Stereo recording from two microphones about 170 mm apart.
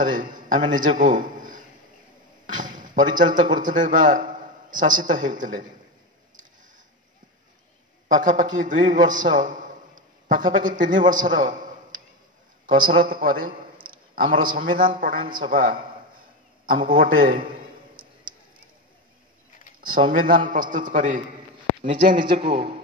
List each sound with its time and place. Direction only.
0.0 s a man's voice: 50° right (ahead or behind)
8.1 s a man's voice: 50° right (ahead or behind)
15.5 s a sound: 55° right (ahead or behind)
19.8 s a man's voice: 55° right (ahead or behind)
22.2 s a man's voice: 30° right (ahead or behind)